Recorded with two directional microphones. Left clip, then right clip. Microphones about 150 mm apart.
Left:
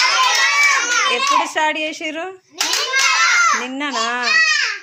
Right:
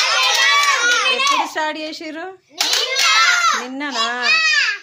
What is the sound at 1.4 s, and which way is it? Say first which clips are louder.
Speech: left 3 dB; centre (ahead or behind).